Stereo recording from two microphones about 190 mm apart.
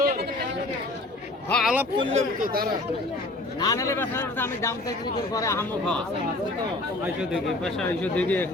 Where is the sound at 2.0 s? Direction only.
35° right (ahead or behind).